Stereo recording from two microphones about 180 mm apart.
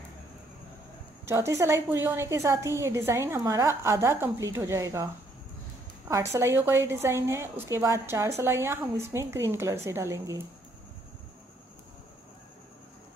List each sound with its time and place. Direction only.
1.2 s a woman's voice: 15° right (ahead or behind)
6.3 s a woman's voice: 15° right (ahead or behind)